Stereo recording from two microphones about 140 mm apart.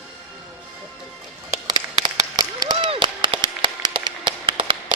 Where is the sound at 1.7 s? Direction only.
30° right (ahead or behind).